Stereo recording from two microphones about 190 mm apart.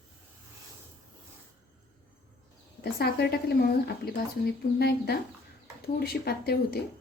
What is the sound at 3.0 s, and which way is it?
A woman's voice, 55° left (ahead or behind).